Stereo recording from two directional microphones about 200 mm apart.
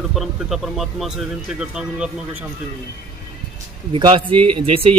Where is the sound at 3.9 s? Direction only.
25° right (ahead or behind).